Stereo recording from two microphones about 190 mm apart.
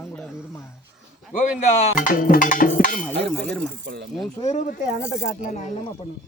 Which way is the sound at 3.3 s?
5° left (ahead or behind).